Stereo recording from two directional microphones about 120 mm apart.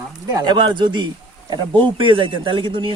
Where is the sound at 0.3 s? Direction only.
35° right (ahead or behind).